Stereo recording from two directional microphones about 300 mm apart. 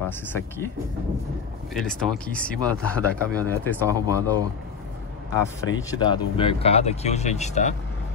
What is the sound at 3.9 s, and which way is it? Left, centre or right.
Speech, centre.